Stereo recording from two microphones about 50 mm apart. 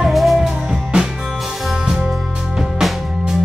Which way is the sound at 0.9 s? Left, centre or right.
Centre.